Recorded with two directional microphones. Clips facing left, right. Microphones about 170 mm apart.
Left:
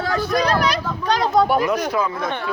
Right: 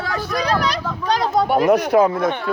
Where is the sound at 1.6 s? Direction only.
65° right (ahead or behind).